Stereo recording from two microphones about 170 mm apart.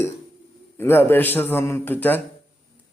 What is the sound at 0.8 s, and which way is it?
Speech, 15° left (ahead or behind).